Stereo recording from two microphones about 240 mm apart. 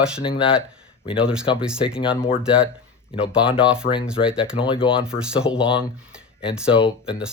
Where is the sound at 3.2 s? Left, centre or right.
Centre.